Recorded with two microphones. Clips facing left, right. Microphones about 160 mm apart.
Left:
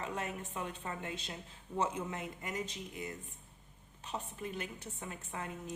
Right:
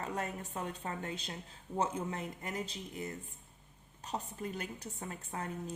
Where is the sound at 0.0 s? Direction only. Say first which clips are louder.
Right 1 dB; 40° right (ahead or behind).